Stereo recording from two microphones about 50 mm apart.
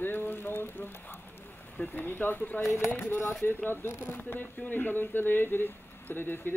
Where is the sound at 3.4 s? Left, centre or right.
Left.